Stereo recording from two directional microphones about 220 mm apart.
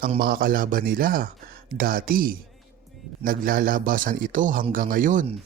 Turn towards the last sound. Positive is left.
turn(degrees=-35)  # may be behind; listen again after turning